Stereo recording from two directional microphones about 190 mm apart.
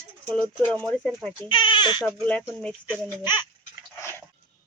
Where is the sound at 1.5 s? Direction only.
25° left (ahead or behind).